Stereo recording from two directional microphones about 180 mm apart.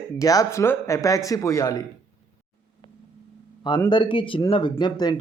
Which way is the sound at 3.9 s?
25° left (ahead or behind).